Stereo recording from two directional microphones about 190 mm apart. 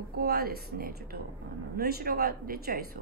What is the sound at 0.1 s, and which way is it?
Speech, 55° right (ahead or behind).